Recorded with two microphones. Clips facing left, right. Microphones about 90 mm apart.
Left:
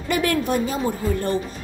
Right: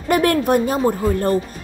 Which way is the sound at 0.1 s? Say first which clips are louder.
Right 5 dB; 50° right (ahead or behind).